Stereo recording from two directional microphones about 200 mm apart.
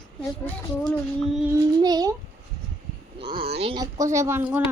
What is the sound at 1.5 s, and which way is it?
Speech, 20° right (ahead or behind).